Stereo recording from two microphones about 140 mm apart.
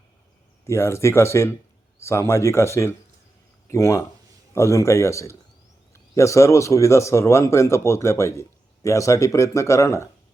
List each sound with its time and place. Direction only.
0.6 s a man's voice: 20° left (ahead or behind)